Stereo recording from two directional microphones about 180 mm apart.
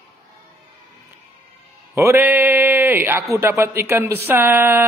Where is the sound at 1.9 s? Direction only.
10° right (ahead or behind).